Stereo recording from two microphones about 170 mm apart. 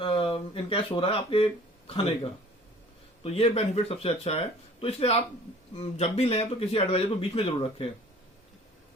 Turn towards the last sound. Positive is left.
turn(degrees=35)  # may be behind; listen again after turning